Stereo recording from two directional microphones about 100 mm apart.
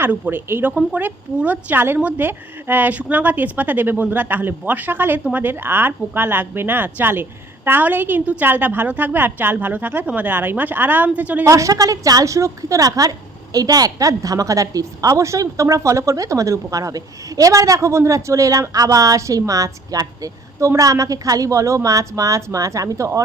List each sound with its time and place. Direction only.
0.0 s speech: 20° right (ahead or behind)
11.4 s a woman's voice: 35° right (ahead or behind)